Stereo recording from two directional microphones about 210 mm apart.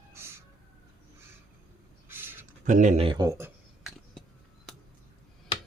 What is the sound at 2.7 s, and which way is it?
Speech, 35° right (ahead or behind).